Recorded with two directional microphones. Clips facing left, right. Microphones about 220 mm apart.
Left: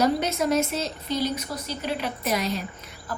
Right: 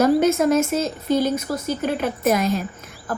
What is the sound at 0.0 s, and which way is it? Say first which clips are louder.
A woman's voice: right 7 dB; 50° right (ahead or behind).